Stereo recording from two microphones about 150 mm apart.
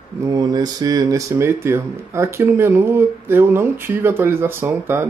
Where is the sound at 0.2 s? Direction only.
25° right (ahead or behind).